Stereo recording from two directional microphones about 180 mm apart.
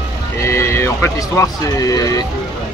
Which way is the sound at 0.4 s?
15° left (ahead or behind).